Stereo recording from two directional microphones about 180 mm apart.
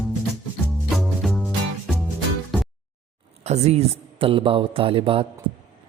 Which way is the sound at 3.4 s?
35° right (ahead or behind).